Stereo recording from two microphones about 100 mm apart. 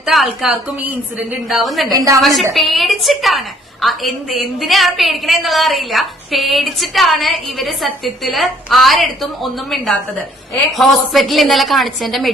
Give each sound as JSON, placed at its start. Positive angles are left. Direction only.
{"t": 0.0, "sound": "a woman's voice", "side_deg": -5}
{"t": 1.9, "sound": "a woman's voice", "side_deg": -40}
{"t": 2.2, "sound": "a woman's voice", "side_deg": 0}